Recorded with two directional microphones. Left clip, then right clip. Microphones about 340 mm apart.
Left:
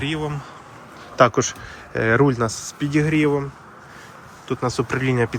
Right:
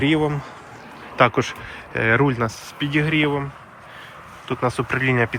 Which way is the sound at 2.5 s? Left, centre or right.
Left.